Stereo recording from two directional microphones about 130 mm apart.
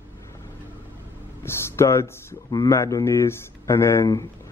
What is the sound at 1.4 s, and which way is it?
Speech, 20° left (ahead or behind).